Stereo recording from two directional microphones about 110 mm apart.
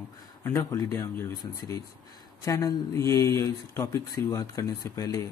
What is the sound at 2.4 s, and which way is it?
Speech, 30° left (ahead or behind).